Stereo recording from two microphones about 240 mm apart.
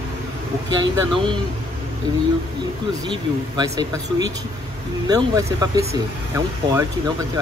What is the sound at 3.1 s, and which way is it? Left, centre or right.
Speech, centre.